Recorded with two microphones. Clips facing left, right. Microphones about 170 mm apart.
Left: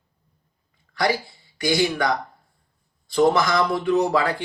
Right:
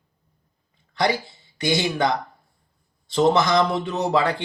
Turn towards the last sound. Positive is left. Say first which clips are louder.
# left 1 dB
turn(degrees=-25)  # may be behind; listen again after turning